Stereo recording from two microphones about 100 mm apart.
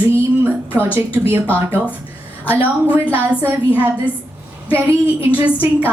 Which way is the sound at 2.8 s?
15° right (ahead or behind).